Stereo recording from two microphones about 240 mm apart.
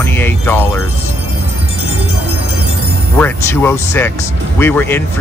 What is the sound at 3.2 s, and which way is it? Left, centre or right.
Speech, centre.